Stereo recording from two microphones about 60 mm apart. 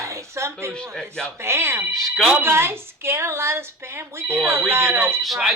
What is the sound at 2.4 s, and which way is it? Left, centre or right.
Speech, right.